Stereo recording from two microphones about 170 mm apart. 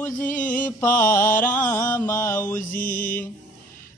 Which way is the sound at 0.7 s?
10° left (ahead or behind).